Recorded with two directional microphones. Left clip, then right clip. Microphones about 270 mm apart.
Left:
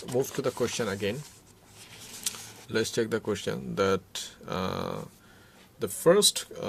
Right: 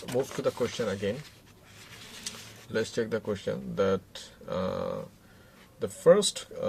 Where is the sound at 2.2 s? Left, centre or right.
Left.